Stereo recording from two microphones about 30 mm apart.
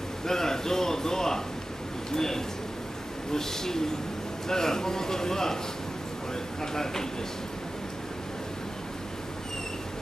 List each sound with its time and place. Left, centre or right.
0.3 s a sound: centre
3.3 s speech: centre
6.6 s speech: centre